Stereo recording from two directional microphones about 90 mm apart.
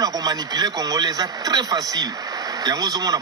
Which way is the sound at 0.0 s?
50° right (ahead or behind).